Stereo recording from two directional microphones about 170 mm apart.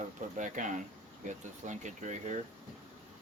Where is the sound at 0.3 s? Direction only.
50° right (ahead or behind).